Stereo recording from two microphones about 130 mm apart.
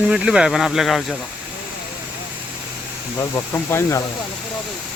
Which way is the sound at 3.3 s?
20° left (ahead or behind).